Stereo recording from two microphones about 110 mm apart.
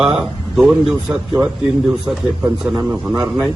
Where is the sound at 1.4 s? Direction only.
20° right (ahead or behind).